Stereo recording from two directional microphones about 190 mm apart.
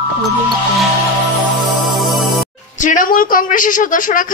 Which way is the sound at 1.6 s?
Centre (ahead or behind).